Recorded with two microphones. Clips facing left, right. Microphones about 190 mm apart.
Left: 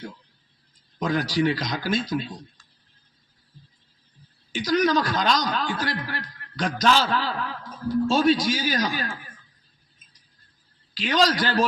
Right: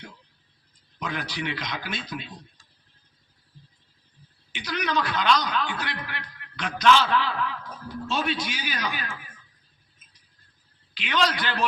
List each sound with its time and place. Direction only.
0.9 s a man's voice: 40° left (ahead or behind)
4.5 s a man's voice: 40° left (ahead or behind)
11.0 s a man's voice: 40° left (ahead or behind)